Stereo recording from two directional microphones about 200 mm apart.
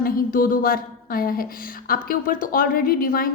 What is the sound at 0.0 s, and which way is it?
A woman's voice, 45° left (ahead or behind).